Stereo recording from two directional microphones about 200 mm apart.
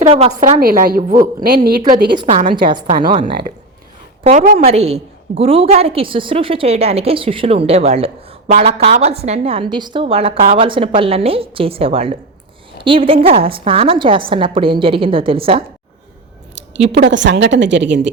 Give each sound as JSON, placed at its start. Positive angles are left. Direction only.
{"t": 0.0, "sound": "a woman's voice", "side_deg": -25}
{"t": 2.0, "sound": "a woman's voice", "side_deg": -25}
{"t": 4.2, "sound": "a woman's voice", "side_deg": -40}
{"t": 16.6, "sound": "a woman's voice", "side_deg": -65}